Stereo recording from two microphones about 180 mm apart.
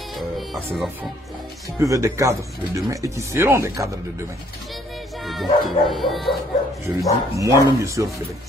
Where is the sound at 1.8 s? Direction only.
15° right (ahead or behind).